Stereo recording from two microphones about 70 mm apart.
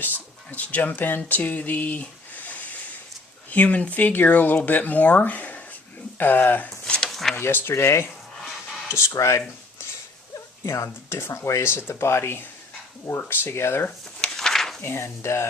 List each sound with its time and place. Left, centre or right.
0.0 s speech: left
6.8 s a sound: centre
7.3 s speech: left
10.8 s speech: left
14.2 s a sound: centre
14.8 s speech: left